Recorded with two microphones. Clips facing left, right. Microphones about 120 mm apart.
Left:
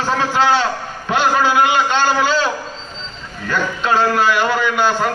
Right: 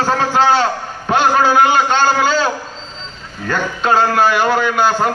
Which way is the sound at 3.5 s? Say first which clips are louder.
Right 2 dB; 40° right (ahead or behind).